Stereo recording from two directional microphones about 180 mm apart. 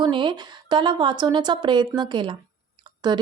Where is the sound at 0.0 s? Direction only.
25° right (ahead or behind).